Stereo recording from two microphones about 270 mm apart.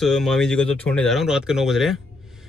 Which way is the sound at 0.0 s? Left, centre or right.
Centre.